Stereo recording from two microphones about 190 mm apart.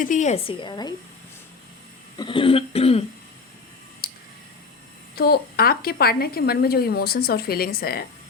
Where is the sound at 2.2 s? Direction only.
25° left (ahead or behind).